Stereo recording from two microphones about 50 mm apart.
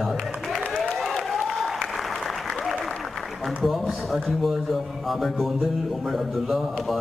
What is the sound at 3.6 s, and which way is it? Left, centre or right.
Speech, centre.